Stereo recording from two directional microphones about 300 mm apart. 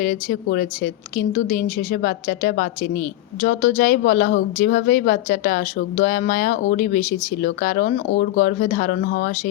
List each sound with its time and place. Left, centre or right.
0.0 s speech: left